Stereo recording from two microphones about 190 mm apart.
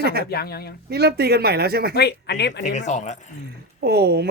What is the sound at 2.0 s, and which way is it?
Speech, 60° left (ahead or behind).